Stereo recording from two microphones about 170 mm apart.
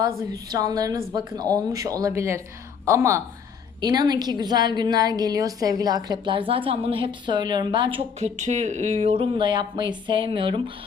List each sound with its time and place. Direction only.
0.0 s a woman's voice: 20° right (ahead or behind)